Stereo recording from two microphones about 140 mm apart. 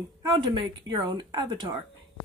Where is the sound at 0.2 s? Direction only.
30° right (ahead or behind).